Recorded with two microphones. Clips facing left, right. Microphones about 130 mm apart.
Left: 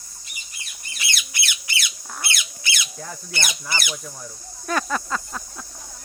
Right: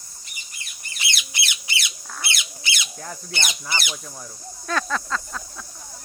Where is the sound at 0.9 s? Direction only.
20° right (ahead or behind).